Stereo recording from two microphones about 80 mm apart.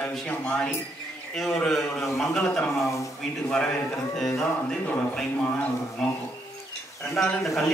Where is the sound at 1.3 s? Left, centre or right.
Centre.